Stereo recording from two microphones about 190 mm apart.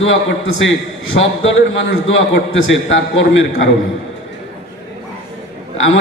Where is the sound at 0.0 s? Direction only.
90° left.